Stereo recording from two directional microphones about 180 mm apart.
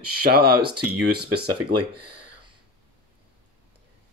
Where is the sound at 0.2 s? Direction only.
60° right (ahead or behind).